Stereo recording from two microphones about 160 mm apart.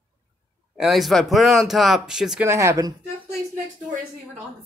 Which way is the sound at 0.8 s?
Centre (ahead or behind).